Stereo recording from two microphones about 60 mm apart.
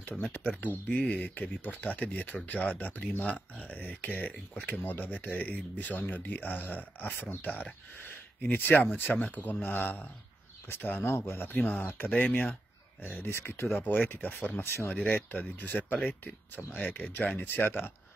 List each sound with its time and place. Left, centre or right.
0.6 s speech: left
11.1 s speech: left
11.5 s speech: left
12.1 s speech: centre
13.3 s speech: left
13.7 s speech: left
14.6 s speech: left
14.9 s speech: left